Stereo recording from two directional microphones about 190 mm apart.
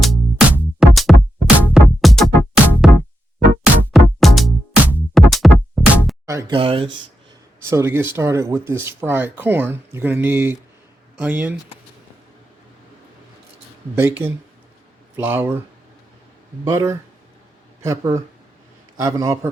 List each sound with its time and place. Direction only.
0.0 s music: centre (ahead or behind)
6.2 s music: 15° right (ahead or behind)
6.6 s speech: 30° right (ahead or behind)
7.6 s speech: 15° right (ahead or behind)
13.9 s speech: 10° right (ahead or behind)
16.6 s speech: 15° right (ahead or behind)